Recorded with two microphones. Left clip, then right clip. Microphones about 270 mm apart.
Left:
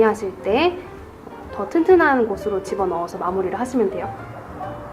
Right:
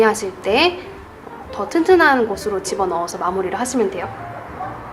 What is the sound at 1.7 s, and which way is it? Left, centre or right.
Speech, centre.